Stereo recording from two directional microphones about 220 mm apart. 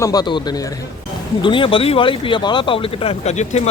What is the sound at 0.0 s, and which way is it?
A man's voice, 15° left (ahead or behind).